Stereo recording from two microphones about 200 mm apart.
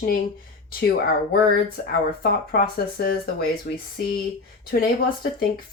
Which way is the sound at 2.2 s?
45° left (ahead or behind).